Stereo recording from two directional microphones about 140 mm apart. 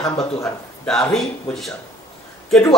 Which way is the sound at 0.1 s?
25° left (ahead or behind).